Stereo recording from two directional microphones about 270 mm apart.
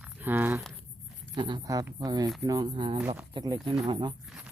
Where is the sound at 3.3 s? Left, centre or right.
Centre.